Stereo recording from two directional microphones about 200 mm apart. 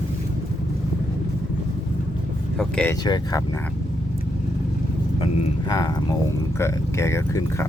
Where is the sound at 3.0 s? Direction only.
20° left (ahead or behind).